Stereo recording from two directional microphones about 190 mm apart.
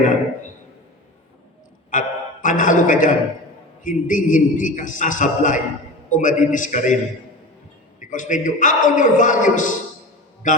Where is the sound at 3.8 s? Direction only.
45° left (ahead or behind).